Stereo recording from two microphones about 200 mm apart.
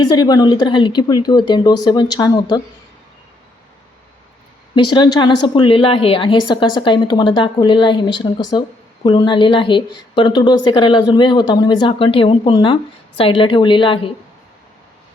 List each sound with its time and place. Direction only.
0.0 s a woman's voice: 20° left (ahead or behind)
4.7 s a woman's voice: 25° left (ahead or behind)